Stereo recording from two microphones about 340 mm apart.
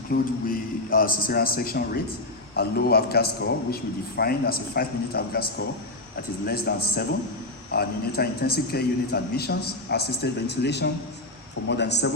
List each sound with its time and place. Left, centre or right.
0.1 s a man's voice: left